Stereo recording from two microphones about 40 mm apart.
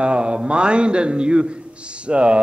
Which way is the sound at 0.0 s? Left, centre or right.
Right.